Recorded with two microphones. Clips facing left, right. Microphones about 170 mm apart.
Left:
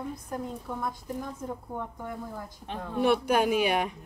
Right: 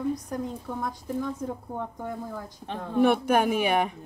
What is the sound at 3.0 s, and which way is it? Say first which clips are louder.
Speech: right 3 dB; 50° right (ahead or behind).